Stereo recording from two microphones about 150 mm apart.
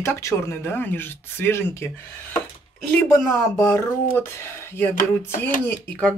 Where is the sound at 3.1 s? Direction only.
15° left (ahead or behind).